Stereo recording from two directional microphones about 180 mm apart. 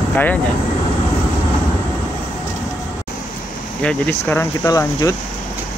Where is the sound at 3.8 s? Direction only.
10° left (ahead or behind).